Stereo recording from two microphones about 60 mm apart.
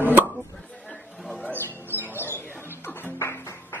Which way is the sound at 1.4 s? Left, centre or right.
Left.